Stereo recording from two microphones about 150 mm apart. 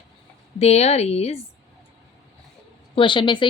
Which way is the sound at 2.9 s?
35° left (ahead or behind).